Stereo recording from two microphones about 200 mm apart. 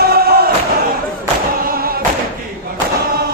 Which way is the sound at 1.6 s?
50° right (ahead or behind).